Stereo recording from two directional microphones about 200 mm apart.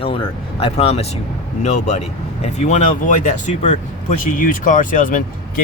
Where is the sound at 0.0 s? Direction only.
25° left (ahead or behind).